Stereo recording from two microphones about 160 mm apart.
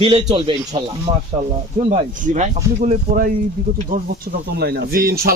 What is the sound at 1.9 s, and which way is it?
Speech, 50° right (ahead or behind).